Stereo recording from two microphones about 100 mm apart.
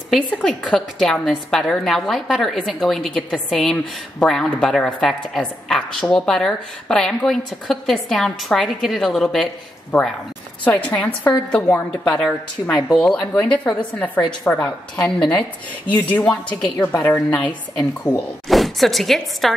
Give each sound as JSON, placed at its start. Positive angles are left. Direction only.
{"t": 0.3, "sound": "a woman's voice", "side_deg": 10}
{"t": 10.6, "sound": "a woman's voice", "side_deg": 15}
{"t": 18.5, "sound": "a woman's voice", "side_deg": 0}